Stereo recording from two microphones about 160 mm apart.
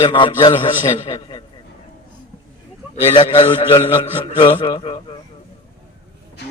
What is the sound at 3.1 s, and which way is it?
A man's voice, 30° left (ahead or behind).